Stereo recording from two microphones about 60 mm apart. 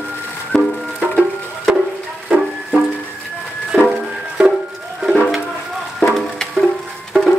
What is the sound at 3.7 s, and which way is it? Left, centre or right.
Music, right.